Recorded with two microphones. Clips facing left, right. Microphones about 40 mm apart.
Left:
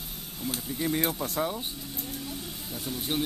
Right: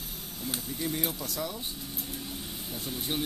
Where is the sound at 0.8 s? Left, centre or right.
Left.